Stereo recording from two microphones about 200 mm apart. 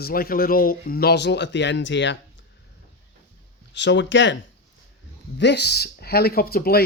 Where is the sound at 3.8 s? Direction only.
60° left (ahead or behind).